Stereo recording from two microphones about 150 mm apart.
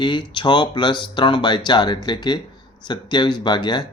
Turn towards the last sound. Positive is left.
turn(degrees=30)  # may be behind; listen again after turning